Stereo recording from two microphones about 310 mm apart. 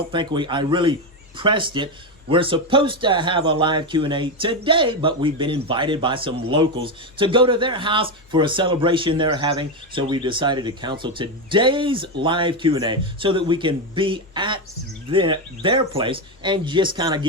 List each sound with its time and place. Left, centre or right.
0.1 s speech: centre